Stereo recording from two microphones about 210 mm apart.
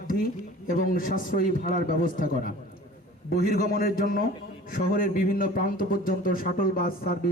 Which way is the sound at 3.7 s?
45° left (ahead or behind).